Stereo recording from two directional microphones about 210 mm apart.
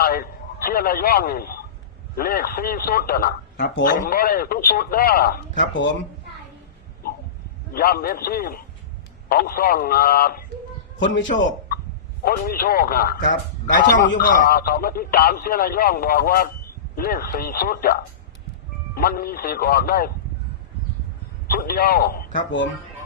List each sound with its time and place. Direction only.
0.0 s a man's voice: 45° left (ahead or behind)
7.7 s speech: 45° left (ahead or behind)
11.3 s a man's voice: 35° left (ahead or behind)
18.9 s speech: 45° left (ahead or behind)
21.5 s speech: 45° left (ahead or behind)